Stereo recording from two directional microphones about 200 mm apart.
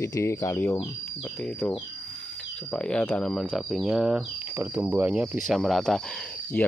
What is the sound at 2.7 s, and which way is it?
Speech, 5° left (ahead or behind).